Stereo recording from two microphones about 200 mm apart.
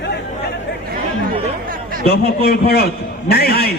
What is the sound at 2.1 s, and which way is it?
A man's voice, 55° left (ahead or behind).